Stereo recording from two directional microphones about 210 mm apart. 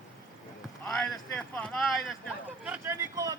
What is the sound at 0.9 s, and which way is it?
Speech, 5° left (ahead or behind).